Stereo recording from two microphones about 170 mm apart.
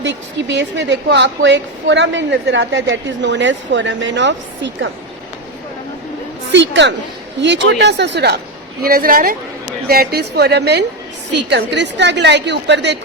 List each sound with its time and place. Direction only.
0.0 s a woman's voice: 90° right
6.5 s a woman's voice: 90° right
8.8 s a woman's voice: 60° right (ahead or behind); by 13.0 s 90° right